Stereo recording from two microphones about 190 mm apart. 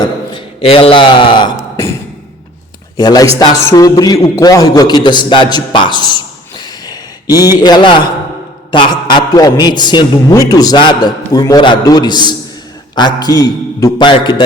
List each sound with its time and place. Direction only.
0.0 s a man's voice: 25° left (ahead or behind)
3.0 s a man's voice: 20° left (ahead or behind)